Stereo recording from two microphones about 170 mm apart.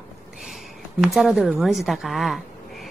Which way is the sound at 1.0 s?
Centre (ahead or behind).